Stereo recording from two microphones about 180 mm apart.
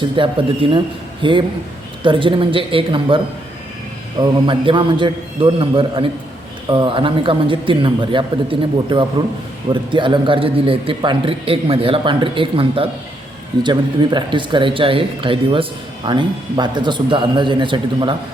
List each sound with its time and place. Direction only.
0.2 s speech: 30° right (ahead or behind)
4.2 s speech: 25° right (ahead or behind)